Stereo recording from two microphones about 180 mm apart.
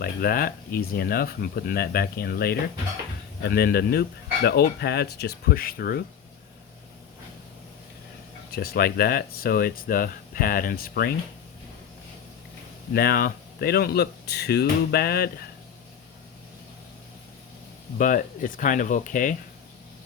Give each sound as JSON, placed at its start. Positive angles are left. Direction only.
{"t": 0.0, "sound": "speech", "side_deg": 55}
{"t": 8.5, "sound": "speech", "side_deg": 60}
{"t": 12.9, "sound": "speech", "side_deg": 60}
{"t": 17.9, "sound": "speech", "side_deg": 45}